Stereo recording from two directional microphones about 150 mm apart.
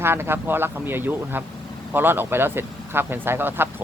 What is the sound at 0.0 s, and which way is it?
Speech, 15° right (ahead or behind).